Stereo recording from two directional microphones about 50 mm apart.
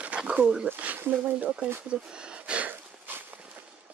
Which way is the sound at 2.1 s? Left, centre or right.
Right.